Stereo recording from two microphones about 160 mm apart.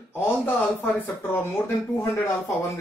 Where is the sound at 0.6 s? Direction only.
10° left (ahead or behind).